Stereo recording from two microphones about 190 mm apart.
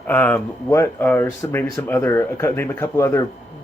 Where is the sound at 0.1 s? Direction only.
5° left (ahead or behind).